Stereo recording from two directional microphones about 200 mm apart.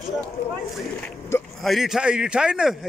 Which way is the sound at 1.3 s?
15° left (ahead or behind).